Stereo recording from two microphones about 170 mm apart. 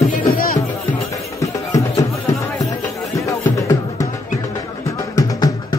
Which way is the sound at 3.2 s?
20° left (ahead or behind).